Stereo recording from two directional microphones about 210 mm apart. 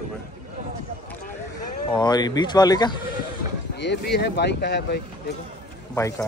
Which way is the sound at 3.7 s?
55° left (ahead or behind).